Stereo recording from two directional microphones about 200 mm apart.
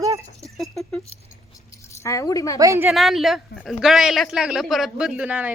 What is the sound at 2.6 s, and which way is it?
Speech, 15° right (ahead or behind).